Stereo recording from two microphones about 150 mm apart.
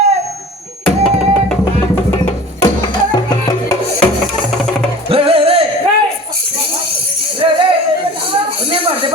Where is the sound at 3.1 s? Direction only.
25° left (ahead or behind).